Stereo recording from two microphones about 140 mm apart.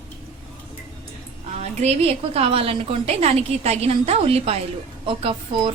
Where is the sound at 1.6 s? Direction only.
50° right (ahead or behind).